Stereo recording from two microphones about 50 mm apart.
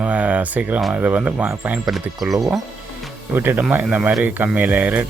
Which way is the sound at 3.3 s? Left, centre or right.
Right.